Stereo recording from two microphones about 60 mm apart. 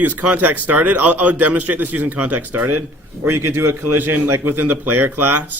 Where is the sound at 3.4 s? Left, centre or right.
Right.